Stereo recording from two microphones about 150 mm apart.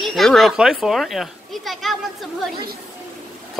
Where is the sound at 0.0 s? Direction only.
Centre (ahead or behind).